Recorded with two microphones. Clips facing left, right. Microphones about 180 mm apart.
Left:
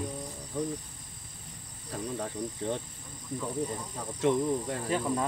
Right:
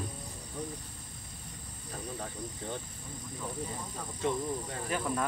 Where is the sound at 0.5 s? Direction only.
80° left.